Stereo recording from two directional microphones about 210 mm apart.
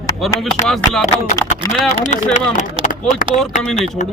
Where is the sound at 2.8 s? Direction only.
40° left (ahead or behind).